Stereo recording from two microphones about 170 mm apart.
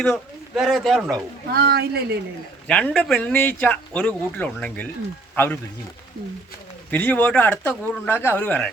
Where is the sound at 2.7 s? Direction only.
5° left (ahead or behind).